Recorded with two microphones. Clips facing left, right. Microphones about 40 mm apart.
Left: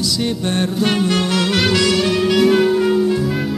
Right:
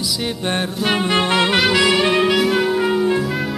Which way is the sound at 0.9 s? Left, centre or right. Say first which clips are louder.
Right 4 dB; right.